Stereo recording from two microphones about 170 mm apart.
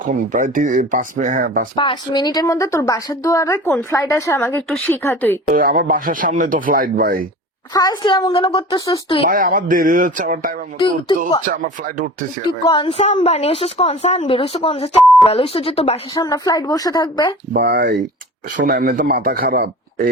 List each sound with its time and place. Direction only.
0.0 s speech: 50° right (ahead or behind)
1.7 s a woman's voice: 30° left (ahead or behind); by 5.4 s 10° left (ahead or behind)
5.5 s speech: 55° right (ahead or behind)
7.7 s a woman's voice: 25° left (ahead or behind)
9.3 s speech: 55° right (ahead or behind)
10.8 s a woman's voice: 30° left (ahead or behind)
11.4 s speech: 50° right (ahead or behind)
12.6 s a woman's voice: 30° left (ahead or behind)
16.1 s a woman's voice: 20° left (ahead or behind)
17.5 s speech: 65° right (ahead or behind)